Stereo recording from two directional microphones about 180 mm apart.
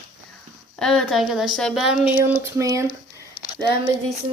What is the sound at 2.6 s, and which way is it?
Speech, 20° right (ahead or behind).